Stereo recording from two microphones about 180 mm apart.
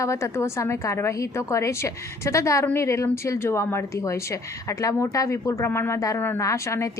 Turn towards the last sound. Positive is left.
turn(degrees=15)  # may be behind; listen again after turning